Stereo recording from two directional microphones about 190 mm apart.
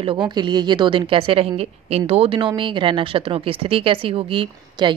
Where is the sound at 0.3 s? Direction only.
20° right (ahead or behind).